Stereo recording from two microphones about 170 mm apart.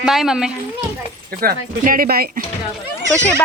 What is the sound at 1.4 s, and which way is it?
Speech, 60° right (ahead or behind).